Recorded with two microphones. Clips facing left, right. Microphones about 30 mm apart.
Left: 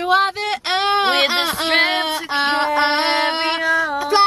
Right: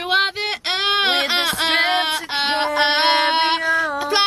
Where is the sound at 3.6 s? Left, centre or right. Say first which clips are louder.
Left 1 dB; centre.